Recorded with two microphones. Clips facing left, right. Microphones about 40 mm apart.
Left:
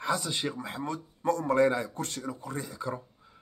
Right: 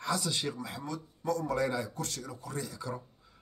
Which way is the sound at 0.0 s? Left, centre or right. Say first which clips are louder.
Left 2 dB; left.